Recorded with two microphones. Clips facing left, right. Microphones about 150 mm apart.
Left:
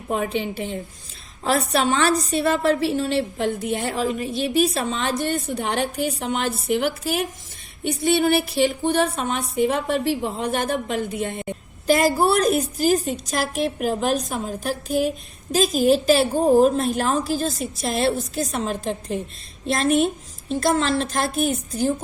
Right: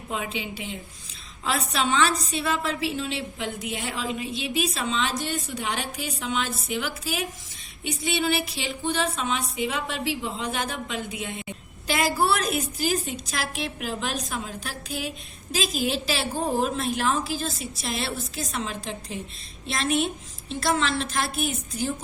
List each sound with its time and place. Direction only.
0.1 s a woman's voice: 50° left (ahead or behind)